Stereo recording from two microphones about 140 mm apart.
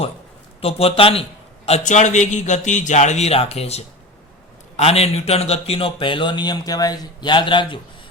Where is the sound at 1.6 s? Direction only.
55° left (ahead or behind).